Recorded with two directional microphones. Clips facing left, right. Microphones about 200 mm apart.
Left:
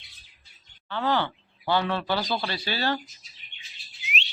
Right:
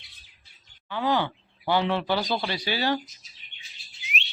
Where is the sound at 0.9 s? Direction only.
15° right (ahead or behind).